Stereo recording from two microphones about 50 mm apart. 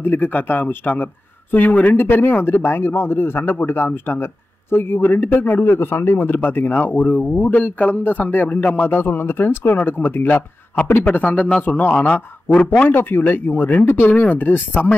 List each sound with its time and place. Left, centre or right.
0.0 s speech: left
2.0 s speech: left
7.2 s speech: left
7.5 s speech: left
11.1 s speech: left